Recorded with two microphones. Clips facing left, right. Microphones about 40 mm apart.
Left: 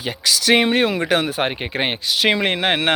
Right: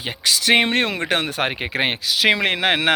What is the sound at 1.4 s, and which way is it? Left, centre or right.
Speech, right.